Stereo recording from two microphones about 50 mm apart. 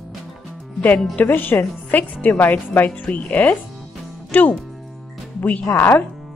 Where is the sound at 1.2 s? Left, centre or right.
Left.